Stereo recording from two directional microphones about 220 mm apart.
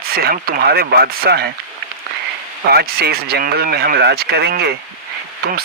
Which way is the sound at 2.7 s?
45° right (ahead or behind).